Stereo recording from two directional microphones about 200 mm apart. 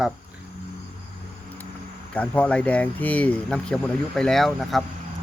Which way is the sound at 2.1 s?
5° left (ahead or behind).